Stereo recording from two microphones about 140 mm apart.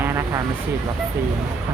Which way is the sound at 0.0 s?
15° right (ahead or behind).